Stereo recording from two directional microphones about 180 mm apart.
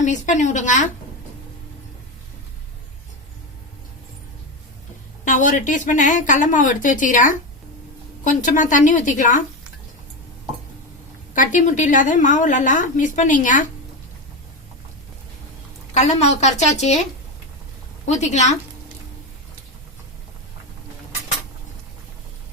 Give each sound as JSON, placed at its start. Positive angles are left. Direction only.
{"t": 0.0, "sound": "a woman's voice", "side_deg": 45}
{"t": 5.3, "sound": "a woman's voice", "side_deg": 45}
{"t": 11.3, "sound": "a woman's voice", "side_deg": 45}
{"t": 16.0, "sound": "a woman's voice", "side_deg": 35}
{"t": 18.1, "sound": "a woman's voice", "side_deg": 40}